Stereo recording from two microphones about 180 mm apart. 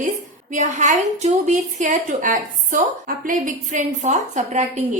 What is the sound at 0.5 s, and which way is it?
A woman's voice, 40° right (ahead or behind).